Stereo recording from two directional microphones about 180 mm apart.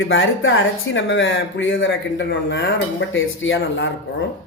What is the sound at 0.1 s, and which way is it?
Speech, 90° left.